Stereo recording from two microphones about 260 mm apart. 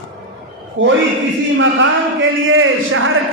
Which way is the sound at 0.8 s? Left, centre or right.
Right.